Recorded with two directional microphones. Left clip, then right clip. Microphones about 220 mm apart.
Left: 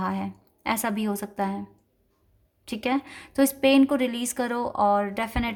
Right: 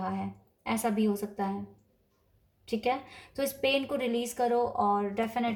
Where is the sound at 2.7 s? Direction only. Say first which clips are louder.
Left 3 dB; 50° left (ahead or behind).